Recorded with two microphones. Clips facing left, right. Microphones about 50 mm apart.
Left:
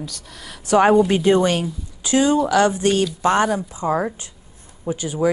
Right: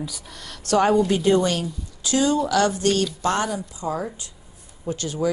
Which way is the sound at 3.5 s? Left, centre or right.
Left.